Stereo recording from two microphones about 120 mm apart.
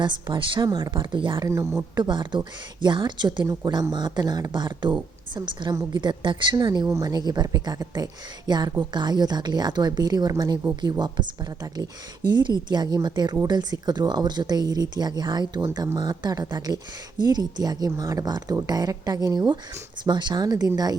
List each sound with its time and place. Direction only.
0.0 s speech: 40° right (ahead or behind)
1.5 s speech: 25° right (ahead or behind)
2.0 s speech: 40° right (ahead or behind)
3.4 s speech: 25° right (ahead or behind)
3.7 s speech: 35° right (ahead or behind)